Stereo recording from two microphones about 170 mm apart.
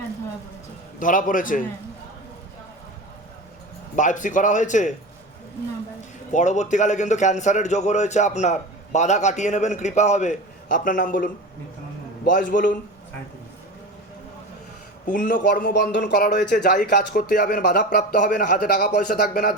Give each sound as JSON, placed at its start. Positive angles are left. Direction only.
{"t": 0.9, "sound": "a man's voice", "side_deg": 50}
{"t": 3.9, "sound": "a man's voice", "side_deg": 50}
{"t": 6.3, "sound": "a man's voice", "side_deg": 45}
{"t": 15.0, "sound": "a man's voice", "side_deg": 50}
{"t": 17.8, "sound": "a man's voice", "side_deg": 50}